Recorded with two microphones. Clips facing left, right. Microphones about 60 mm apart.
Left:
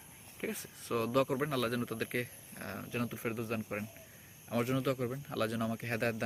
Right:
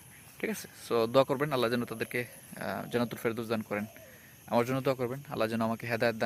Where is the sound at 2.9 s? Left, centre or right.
Right.